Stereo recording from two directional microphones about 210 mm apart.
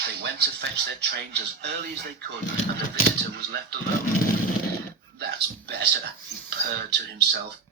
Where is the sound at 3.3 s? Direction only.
50° right (ahead or behind).